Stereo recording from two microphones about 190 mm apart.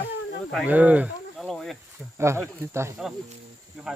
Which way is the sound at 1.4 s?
Centre (ahead or behind).